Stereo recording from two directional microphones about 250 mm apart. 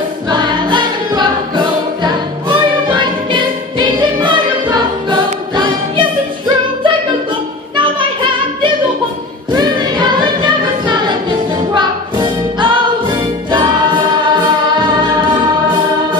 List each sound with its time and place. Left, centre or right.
0.3 s music: centre
2.9 s music: centre
9.5 s choir: centre
11.7 s music: centre